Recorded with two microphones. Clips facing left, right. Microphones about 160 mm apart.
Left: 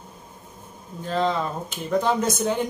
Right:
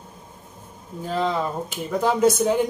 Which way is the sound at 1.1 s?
5° right (ahead or behind).